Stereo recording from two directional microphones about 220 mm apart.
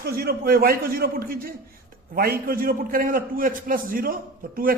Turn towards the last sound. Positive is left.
turn(degrees=-40)  # may be behind; listen again after turning